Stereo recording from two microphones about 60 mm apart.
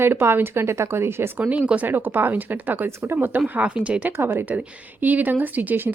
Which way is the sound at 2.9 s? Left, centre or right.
Right.